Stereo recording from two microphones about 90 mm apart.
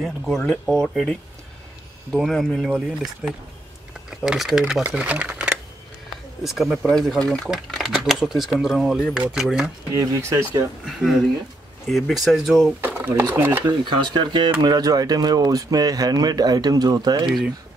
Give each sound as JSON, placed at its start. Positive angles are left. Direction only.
{"t": 0.0, "sound": "speech", "side_deg": 0}
{"t": 2.1, "sound": "speech", "side_deg": 0}
{"t": 4.1, "sound": "speech", "side_deg": -5}
{"t": 9.9, "sound": "speech", "side_deg": -35}
{"t": 10.9, "sound": "speech", "side_deg": 0}
{"t": 12.8, "sound": "a sound", "side_deg": -15}
{"t": 13.3, "sound": "speech", "side_deg": -20}
{"t": 13.7, "sound": "speech", "side_deg": -55}
{"t": 14.6, "sound": "speech", "side_deg": -45}